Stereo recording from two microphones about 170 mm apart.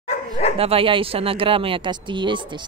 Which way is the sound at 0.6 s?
35° right (ahead or behind).